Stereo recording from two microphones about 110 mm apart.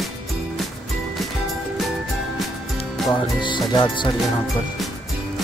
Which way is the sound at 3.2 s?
45° left (ahead or behind).